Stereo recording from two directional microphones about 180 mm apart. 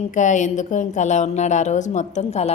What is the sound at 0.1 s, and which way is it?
A woman's voice, 45° left (ahead or behind).